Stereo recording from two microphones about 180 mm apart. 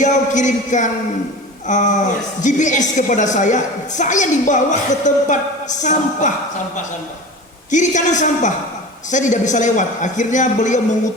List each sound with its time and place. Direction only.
0.0 s a woman's voice: 40° left (ahead or behind)
7.7 s a woman's voice: 40° left (ahead or behind)